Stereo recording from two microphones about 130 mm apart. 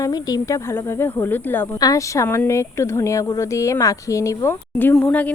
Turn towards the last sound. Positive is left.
turn(degrees=10)  # may be behind; listen again after turning